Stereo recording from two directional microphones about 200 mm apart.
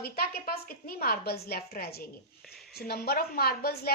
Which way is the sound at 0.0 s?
50° left (ahead or behind).